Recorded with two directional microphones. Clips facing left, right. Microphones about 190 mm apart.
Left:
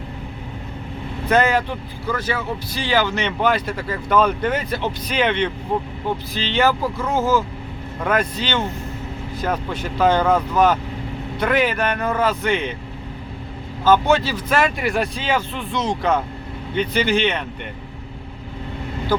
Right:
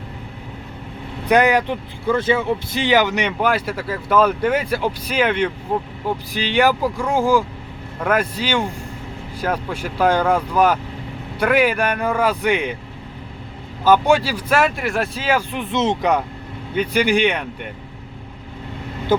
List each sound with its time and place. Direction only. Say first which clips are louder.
1.3 s speech: right 2 dB; 15° right (ahead or behind)
13.8 s speech: right 1 dB; 15° right (ahead or behind)
15.6 s speech: right 3 dB; 25° right (ahead or behind)